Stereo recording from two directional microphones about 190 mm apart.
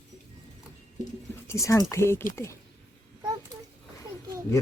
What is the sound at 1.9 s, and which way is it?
Speech, 15° left (ahead or behind).